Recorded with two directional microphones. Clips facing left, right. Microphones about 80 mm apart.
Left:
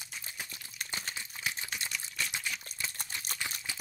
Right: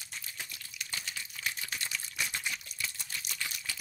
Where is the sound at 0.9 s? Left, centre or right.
Left.